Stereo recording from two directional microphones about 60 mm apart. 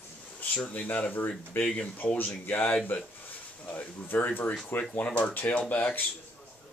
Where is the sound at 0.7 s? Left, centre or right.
Left.